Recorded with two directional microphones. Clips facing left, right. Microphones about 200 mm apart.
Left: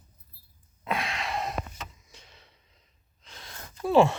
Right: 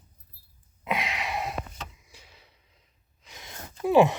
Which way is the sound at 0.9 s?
15° right (ahead or behind).